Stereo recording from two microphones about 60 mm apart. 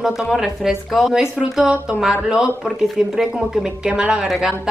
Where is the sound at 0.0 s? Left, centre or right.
Centre.